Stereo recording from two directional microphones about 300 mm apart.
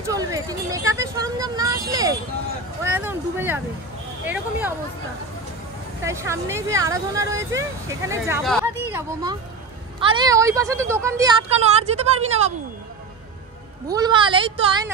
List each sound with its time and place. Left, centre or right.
0.1 s speech: centre
6.0 s speech: centre
8.5 s speech: centre
9.9 s speech: centre
11.8 s speech: right
13.8 s speech: centre